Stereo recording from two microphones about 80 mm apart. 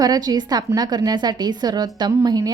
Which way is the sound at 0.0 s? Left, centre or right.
Right.